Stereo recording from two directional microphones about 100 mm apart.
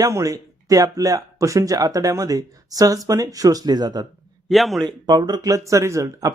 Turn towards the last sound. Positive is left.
turn(degrees=-30)  # may be behind; listen again after turning